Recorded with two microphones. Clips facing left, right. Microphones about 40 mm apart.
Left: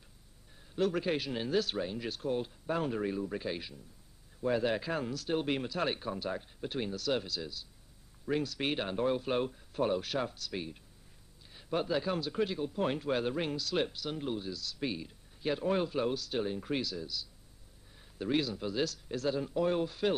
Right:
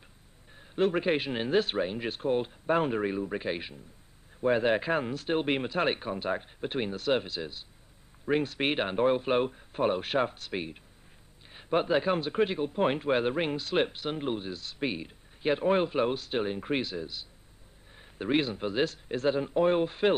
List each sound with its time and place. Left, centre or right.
0.6 s speech: right